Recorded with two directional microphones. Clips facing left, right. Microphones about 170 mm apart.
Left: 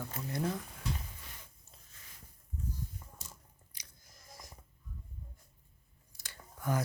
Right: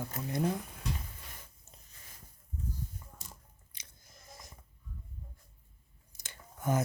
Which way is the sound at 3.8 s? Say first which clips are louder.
Right 3 dB; 25° right (ahead or behind).